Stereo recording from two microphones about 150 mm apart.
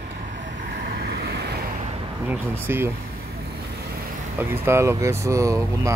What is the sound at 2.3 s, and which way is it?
Speech, 15° right (ahead or behind).